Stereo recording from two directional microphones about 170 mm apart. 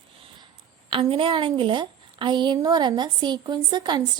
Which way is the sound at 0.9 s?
30° right (ahead or behind).